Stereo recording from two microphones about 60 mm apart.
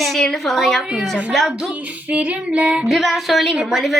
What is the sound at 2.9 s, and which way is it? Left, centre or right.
A woman's voice, centre.